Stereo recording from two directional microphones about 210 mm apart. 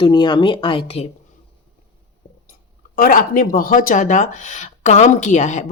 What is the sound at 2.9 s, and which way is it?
Speech, 45° left (ahead or behind).